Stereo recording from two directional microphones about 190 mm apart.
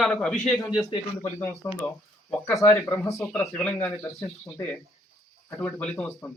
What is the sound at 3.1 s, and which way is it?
A man's voice, centre (ahead or behind).